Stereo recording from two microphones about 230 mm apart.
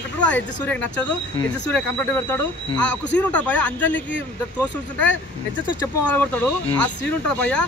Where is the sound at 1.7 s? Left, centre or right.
Centre.